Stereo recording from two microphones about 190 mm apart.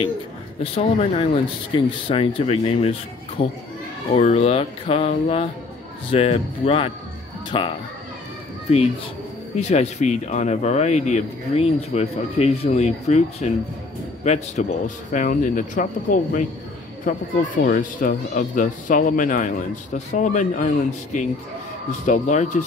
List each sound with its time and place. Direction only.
0.7 s speech: 30° left (ahead or behind)